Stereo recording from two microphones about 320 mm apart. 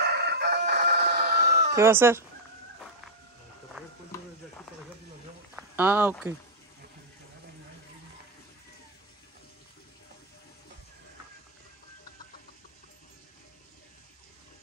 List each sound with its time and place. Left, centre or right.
0.0 s crowing: right
1.8 s speech: centre
5.6 s speech: centre